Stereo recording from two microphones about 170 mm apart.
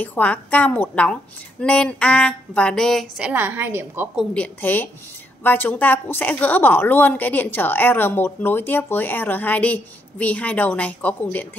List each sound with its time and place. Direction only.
0.0 s a woman's voice: 10° left (ahead or behind); by 4.2 s 15° right (ahead or behind)
4.3 s a woman's voice: 10° left (ahead or behind)